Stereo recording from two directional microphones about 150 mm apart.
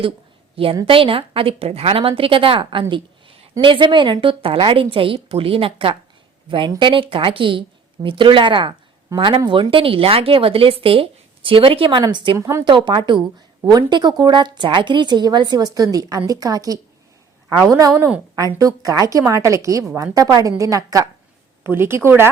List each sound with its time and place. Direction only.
0.5 s a woman's voice: 40° right (ahead or behind)
12.4 s a woman's voice: 20° right (ahead or behind)
12.6 s a woman's voice: 30° right (ahead or behind)
17.9 s speech: 10° right (ahead or behind)
18.3 s a woman's voice: 25° right (ahead or behind)